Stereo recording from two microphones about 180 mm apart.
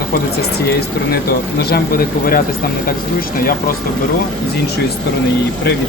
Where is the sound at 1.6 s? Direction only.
60° left (ahead or behind).